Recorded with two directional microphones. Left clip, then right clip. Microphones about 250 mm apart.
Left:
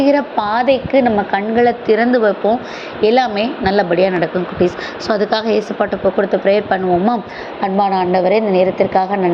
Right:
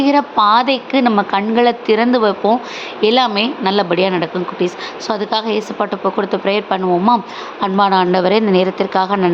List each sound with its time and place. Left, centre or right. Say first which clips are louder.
0.0 s a woman's voice: right 2 dB; centre